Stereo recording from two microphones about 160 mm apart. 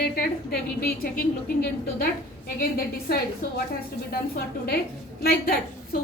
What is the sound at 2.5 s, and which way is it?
A woman's voice, 65° left (ahead or behind).